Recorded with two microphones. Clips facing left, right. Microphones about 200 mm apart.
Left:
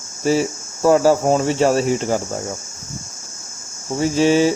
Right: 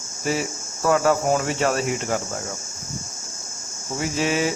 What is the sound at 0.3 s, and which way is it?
Cricket, 30° left (ahead or behind).